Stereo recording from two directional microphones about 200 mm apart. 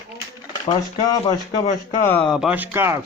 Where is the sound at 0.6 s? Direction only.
20° left (ahead or behind).